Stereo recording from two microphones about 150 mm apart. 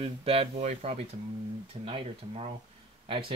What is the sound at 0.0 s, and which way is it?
Speech, 40° right (ahead or behind).